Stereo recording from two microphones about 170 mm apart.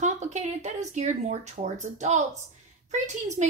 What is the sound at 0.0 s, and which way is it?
A woman's voice, 45° right (ahead or behind).